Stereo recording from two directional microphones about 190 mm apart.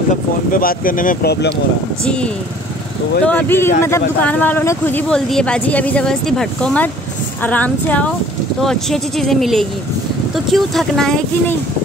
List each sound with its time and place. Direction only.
0.1 s speech: 45° left (ahead or behind)
2.0 s speech: 5° left (ahead or behind)